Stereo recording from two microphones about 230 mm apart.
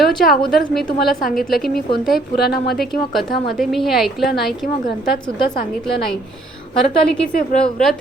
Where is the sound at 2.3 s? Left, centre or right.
Left.